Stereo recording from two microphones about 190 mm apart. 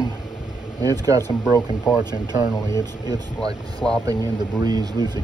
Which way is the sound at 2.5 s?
15° left (ahead or behind).